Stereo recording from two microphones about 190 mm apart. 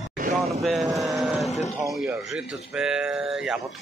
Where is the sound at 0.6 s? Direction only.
Centre (ahead or behind).